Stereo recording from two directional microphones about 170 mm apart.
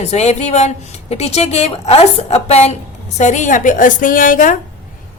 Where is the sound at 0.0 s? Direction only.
40° left (ahead or behind).